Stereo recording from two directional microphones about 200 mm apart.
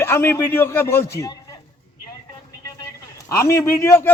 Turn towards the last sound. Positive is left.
turn(degrees=15)  # may be behind; listen again after turning